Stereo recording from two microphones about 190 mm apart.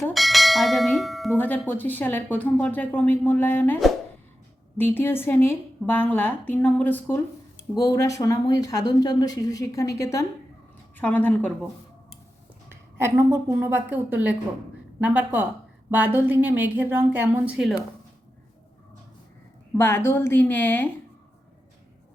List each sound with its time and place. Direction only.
0.1 s bell: centre (ahead or behind)
12.6 s a woman's voice: 15° right (ahead or behind)
19.7 s bell: 15° left (ahead or behind)